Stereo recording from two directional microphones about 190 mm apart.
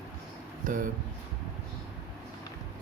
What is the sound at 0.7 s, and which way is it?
Speech, 45° right (ahead or behind).